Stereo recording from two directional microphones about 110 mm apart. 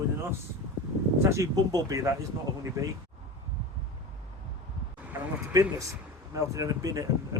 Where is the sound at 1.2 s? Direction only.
25° right (ahead or behind).